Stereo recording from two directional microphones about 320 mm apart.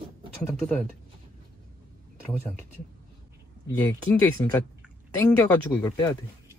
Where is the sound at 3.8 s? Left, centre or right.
Centre.